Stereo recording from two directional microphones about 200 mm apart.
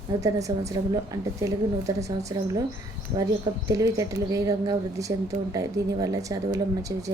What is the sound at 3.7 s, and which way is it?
A woman's voice, 15° right (ahead or behind).